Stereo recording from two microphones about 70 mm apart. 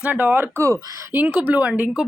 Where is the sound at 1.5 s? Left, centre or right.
Centre.